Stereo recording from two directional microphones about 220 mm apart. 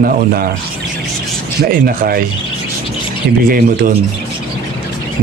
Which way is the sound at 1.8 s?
40° right (ahead or behind).